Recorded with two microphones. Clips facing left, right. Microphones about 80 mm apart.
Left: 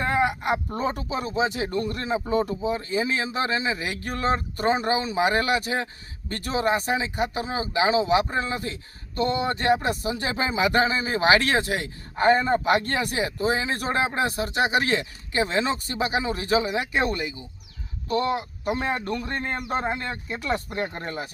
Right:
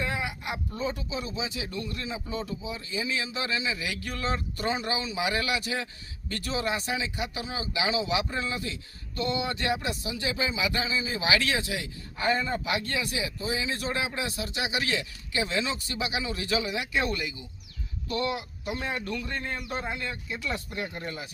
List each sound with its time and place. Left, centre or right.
0.0 s speech: left